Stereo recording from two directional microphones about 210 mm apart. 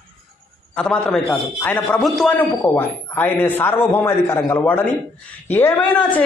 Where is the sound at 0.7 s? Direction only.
5° left (ahead or behind).